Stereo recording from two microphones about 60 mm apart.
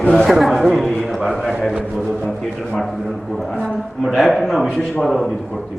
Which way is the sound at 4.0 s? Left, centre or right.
Centre.